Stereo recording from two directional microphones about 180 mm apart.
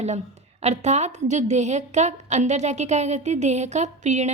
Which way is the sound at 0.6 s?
40° right (ahead or behind).